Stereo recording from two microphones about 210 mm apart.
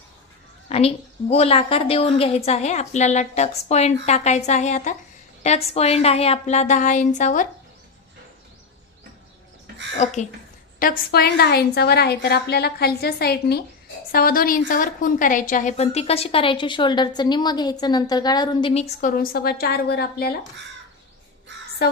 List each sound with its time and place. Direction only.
0.7 s a woman's voice: 30° left (ahead or behind)
10.0 s a woman's voice: 35° left (ahead or behind)
18.9 s a woman's voice: 45° left (ahead or behind)
21.8 s a sound: 50° left (ahead or behind)